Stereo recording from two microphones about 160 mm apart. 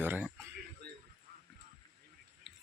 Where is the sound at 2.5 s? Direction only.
Centre (ahead or behind).